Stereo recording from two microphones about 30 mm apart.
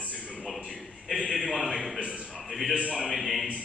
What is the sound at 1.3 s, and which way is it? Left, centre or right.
Speech, centre.